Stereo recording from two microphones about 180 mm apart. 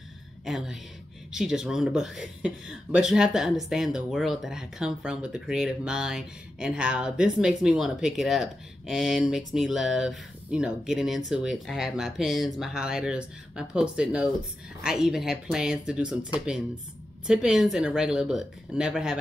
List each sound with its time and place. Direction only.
0.5 s speech: centre (ahead or behind)